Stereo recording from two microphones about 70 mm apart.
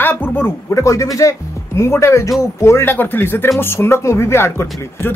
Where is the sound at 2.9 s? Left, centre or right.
Left.